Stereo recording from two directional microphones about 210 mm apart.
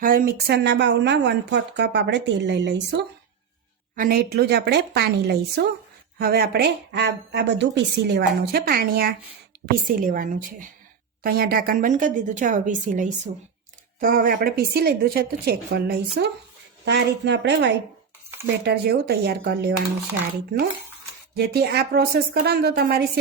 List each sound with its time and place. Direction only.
0.0 s speech: 40° right (ahead or behind); by 3.0 s 55° right (ahead or behind)
3.9 s speech: 45° right (ahead or behind)
21.3 s speech: 50° right (ahead or behind)